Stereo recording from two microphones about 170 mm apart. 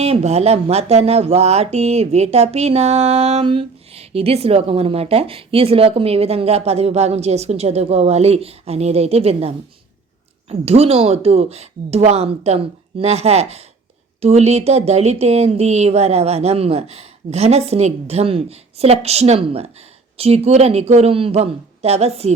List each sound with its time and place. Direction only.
0.0 s speech: 40° right (ahead or behind)
10.5 s speech: 35° right (ahead or behind)